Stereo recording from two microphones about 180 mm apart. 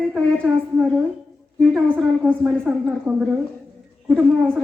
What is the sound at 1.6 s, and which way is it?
A woman's voice, 5° right (ahead or behind).